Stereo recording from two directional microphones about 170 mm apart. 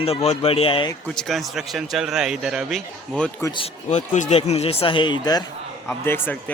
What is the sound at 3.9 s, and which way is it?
Speech, 45° left (ahead or behind).